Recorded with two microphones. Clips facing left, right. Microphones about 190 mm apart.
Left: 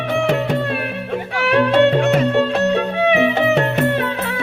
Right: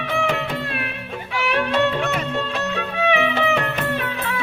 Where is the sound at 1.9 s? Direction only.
30° left (ahead or behind).